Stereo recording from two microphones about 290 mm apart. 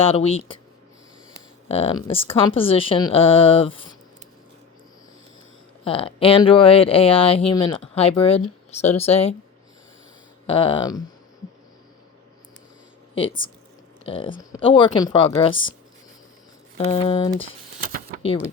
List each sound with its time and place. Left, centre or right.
0.1 s speech: centre
1.6 s speech: left
5.8 s speech: centre
10.4 s speech: centre
13.1 s speech: centre
16.7 s speech: centre
17.4 s shuffling cards: right